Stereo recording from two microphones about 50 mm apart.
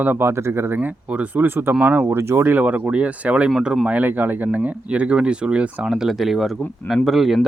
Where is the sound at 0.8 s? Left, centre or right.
Right.